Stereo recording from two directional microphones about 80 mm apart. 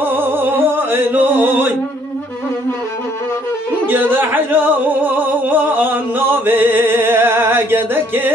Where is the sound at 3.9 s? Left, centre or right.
Right.